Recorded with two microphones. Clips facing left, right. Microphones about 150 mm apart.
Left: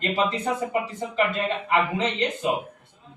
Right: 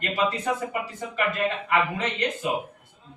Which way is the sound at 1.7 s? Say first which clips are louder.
Left 2 dB; 20° left (ahead or behind).